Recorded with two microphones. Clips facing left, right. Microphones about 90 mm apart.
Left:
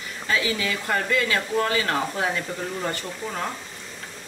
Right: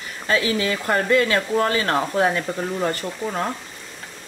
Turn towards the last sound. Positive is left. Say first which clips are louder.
# right 5 dB
turn(degrees=-40)  # may be behind; listen again after turning